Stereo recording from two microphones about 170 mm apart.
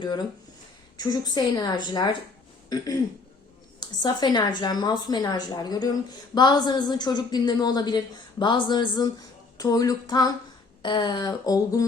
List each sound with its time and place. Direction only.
1.0 s a woman's voice: 25° left (ahead or behind)
2.6 s a sound: 20° left (ahead or behind)
3.8 s a woman's voice: 25° left (ahead or behind)